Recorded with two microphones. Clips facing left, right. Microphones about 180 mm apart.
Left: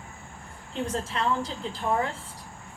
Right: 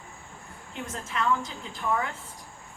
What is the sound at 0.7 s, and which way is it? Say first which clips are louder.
Speech: left 4 dB; 30° left (ahead or behind).